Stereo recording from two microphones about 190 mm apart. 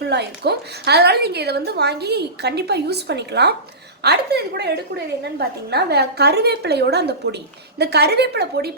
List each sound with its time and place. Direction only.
0.0 s a woman's voice: 60° right (ahead or behind)